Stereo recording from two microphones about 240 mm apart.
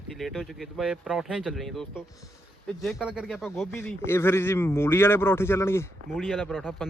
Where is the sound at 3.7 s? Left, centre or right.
Centre.